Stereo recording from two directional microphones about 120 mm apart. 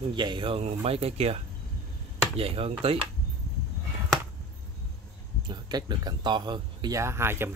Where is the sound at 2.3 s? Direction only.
55° right (ahead or behind).